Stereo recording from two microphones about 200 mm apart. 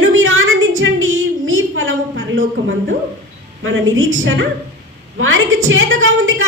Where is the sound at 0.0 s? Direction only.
80° right.